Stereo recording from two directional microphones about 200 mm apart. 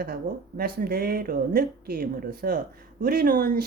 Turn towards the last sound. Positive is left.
turn(degrees=-45)  # may be behind; listen again after turning